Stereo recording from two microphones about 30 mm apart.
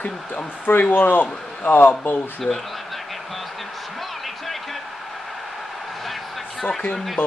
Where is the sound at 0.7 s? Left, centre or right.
Left.